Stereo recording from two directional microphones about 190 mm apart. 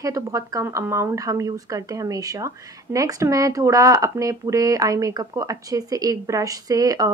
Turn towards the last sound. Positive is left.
turn(degrees=-20)  # may be behind; listen again after turning